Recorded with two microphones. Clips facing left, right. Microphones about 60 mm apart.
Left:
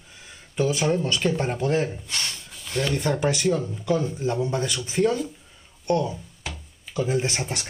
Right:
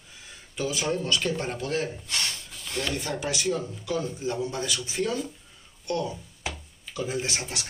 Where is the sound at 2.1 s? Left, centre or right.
Centre.